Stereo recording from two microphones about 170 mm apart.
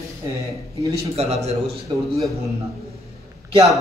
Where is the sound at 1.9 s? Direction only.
30° right (ahead or behind).